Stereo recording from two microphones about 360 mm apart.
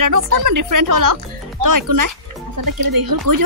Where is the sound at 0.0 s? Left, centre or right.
Right.